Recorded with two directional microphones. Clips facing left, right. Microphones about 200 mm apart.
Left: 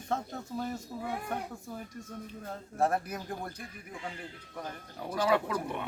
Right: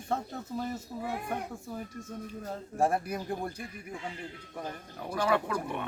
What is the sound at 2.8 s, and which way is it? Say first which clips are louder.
Speech: right 1 dB; 15° right (ahead or behind).